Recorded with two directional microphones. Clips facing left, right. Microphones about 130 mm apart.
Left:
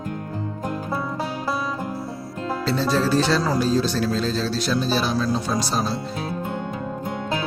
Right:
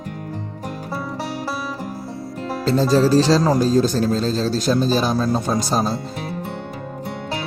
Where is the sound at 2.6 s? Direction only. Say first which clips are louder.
Right 6 dB; 40° right (ahead or behind).